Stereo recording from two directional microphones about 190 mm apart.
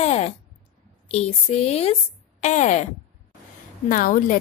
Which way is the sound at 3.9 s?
45° left (ahead or behind).